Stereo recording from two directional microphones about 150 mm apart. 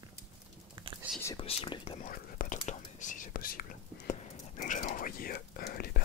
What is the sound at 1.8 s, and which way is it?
Speech, 50° left (ahead or behind).